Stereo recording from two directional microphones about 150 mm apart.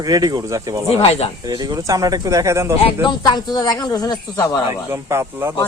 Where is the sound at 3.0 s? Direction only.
25° left (ahead or behind).